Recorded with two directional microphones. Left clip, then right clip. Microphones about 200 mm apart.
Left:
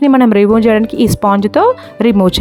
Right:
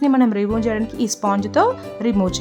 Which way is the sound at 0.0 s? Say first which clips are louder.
Left 9 dB; 35° left (ahead or behind).